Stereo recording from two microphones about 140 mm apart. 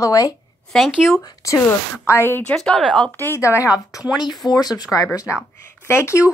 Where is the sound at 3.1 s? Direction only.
15° left (ahead or behind).